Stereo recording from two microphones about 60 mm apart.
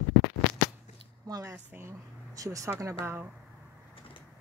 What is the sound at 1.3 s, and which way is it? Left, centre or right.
Speech, right.